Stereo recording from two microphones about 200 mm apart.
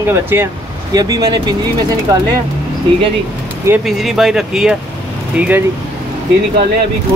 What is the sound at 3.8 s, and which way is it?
Speech, centre (ahead or behind).